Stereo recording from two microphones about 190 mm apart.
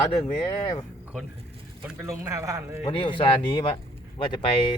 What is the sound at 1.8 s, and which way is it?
A man's voice, 10° right (ahead or behind).